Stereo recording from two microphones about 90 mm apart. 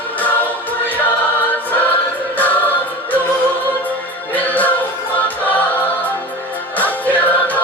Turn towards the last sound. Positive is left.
turn(degrees=20)  # may be behind; listen again after turning